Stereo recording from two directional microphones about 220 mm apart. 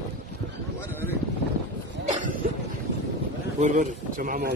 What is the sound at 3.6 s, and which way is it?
Speech, 35° right (ahead or behind).